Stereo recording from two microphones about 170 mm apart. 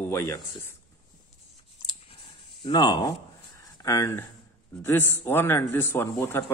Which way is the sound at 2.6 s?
25° left (ahead or behind).